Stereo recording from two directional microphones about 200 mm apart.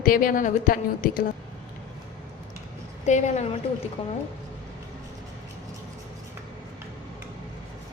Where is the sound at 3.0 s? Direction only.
35° left (ahead or behind).